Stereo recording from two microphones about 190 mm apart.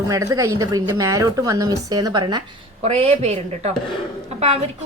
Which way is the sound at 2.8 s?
35° right (ahead or behind).